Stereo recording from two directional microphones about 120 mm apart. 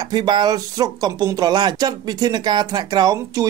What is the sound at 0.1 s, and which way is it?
Speech, 35° right (ahead or behind).